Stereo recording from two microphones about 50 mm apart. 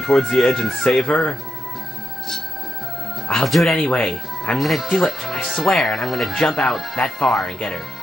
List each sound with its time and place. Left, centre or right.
0.0 s speech: centre
3.3 s speech: centre
3.8 s speech: left
4.6 s speech: centre
6.3 s speech: centre